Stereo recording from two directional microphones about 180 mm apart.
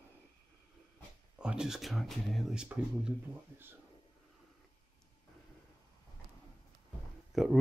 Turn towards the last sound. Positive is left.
turn(degrees=0)  # may be behind; listen again after turning